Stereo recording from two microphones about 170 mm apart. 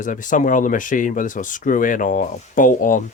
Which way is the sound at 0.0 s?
50° left (ahead or behind).